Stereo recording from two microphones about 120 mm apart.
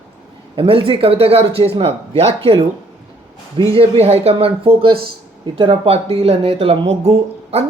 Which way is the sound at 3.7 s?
55° right (ahead or behind).